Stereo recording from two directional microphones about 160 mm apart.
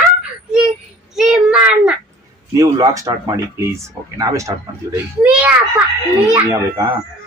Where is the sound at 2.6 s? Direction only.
20° right (ahead or behind).